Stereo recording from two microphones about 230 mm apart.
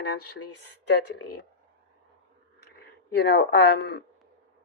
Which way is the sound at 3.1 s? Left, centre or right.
Left.